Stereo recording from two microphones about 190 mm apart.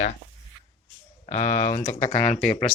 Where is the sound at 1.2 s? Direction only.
40° left (ahead or behind).